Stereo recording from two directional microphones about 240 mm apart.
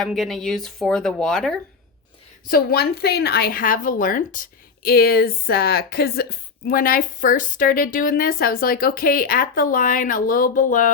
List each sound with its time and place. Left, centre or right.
0.0 s speech: centre
2.5 s a woman's voice: left